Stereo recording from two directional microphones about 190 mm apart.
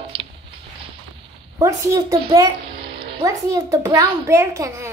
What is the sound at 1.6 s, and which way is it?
A child's voice, 15° right (ahead or behind).